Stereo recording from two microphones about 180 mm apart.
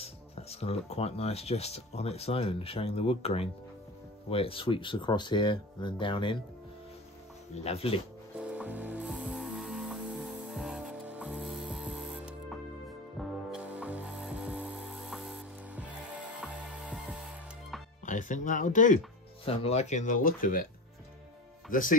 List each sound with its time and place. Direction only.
0.0 s speech: 35° left (ahead or behind)
7.5 s speech: 35° left (ahead or behind)
8.4 s ratchet: 5° right (ahead or behind)
13.2 s music: centre (ahead or behind)
18.0 s speech: 45° left (ahead or behind)
19.4 s speech: 35° left (ahead or behind); by 20.6 s 50° left (ahead or behind)
21.6 s speech: 50° left (ahead or behind)